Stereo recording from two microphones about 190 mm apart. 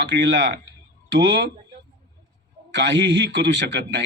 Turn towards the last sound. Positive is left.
turn(degrees=-70)  # may be behind; listen again after turning